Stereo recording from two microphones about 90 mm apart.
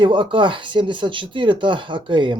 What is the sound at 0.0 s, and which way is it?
A man's voice, 65° right (ahead or behind).